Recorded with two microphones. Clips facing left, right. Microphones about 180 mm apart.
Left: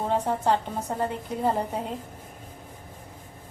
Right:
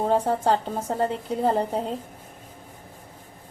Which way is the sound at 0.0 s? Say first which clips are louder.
Right 3 dB; 35° right (ahead or behind).